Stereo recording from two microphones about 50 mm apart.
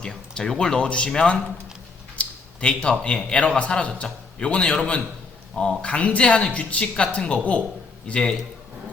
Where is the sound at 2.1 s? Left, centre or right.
Left.